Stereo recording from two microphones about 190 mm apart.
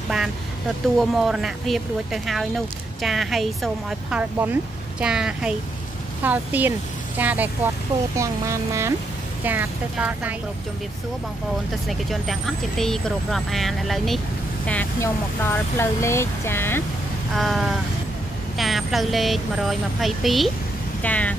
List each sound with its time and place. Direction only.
0.9 s speech: centre (ahead or behind)
11.9 s speech: centre (ahead or behind)
17.4 s speech: centre (ahead or behind)